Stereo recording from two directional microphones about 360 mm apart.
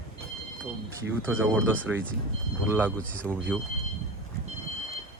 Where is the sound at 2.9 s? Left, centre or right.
Centre.